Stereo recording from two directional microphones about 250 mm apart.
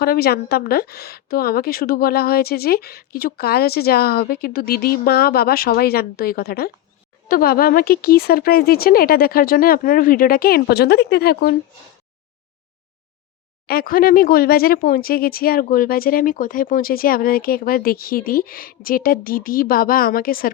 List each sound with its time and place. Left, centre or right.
0.0 s speech: left
13.7 s speech: left